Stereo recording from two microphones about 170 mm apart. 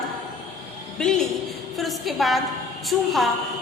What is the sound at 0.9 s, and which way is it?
A woman's voice, 5° left (ahead or behind).